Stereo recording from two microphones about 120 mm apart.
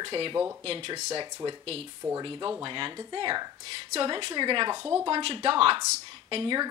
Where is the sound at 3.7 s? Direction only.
50° right (ahead or behind).